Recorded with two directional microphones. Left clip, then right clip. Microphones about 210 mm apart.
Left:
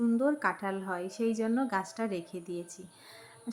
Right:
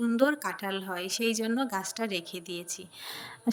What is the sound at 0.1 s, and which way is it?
A woman's voice, 45° right (ahead or behind).